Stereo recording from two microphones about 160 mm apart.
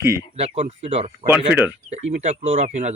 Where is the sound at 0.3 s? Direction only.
45° right (ahead or behind).